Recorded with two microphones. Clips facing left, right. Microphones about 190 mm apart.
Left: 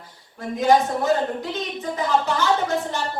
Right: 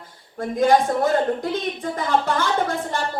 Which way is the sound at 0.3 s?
50° right (ahead or behind).